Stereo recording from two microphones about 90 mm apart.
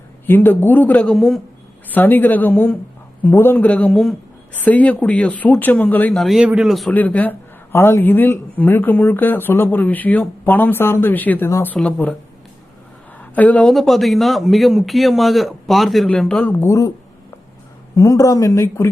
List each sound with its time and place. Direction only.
0.3 s speech: 20° left (ahead or behind)
1.1 s a man's voice: centre (ahead or behind)
1.9 s speech: 20° left (ahead or behind)
6.1 s a man's voice: centre (ahead or behind)
6.9 s speech: 20° left (ahead or behind)
13.3 s speech: 15° left (ahead or behind)
13.7 s a man's voice: centre (ahead or behind)
16.4 s speech: 20° left (ahead or behind)
16.6 s speech: 35° left (ahead or behind)
17.9 s speech: 35° left (ahead or behind)